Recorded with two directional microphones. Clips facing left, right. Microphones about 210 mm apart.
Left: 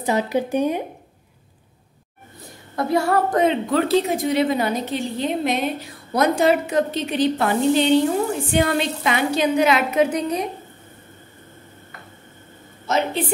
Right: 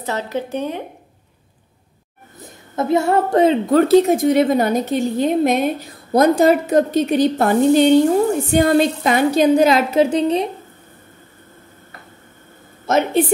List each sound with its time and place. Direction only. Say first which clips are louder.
0.0 s speech: left 3 dB; 15° left (ahead or behind)
2.4 s a woman's voice: right 3 dB; 20° right (ahead or behind)
3.7 s a woman's voice: right 7 dB; 45° right (ahead or behind)
6.1 s a woman's voice: right 5 dB; 35° right (ahead or behind)
12.8 s a woman's voice: right 5 dB; 50° right (ahead or behind)